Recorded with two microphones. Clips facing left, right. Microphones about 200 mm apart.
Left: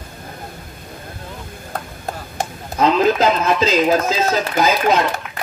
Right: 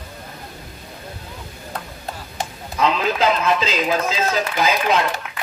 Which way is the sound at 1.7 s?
45° left (ahead or behind).